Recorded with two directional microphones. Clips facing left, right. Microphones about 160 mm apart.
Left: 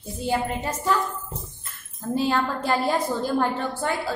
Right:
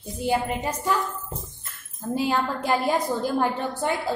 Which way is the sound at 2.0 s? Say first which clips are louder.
Left 1 dB; 10° right (ahead or behind).